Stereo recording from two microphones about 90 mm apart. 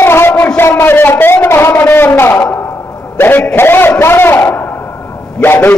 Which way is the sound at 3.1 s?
20° left (ahead or behind).